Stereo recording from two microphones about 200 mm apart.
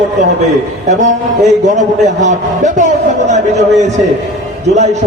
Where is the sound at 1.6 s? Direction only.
35° right (ahead or behind).